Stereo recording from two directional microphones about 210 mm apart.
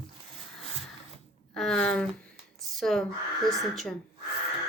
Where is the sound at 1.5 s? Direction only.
5° left (ahead or behind).